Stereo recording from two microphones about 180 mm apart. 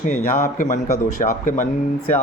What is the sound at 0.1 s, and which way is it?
A man's voice, 50° left (ahead or behind).